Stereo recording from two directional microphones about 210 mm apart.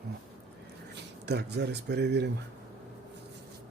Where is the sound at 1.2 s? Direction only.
50° right (ahead or behind).